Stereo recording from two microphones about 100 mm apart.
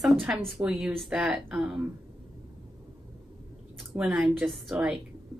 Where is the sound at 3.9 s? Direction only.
5° right (ahead or behind).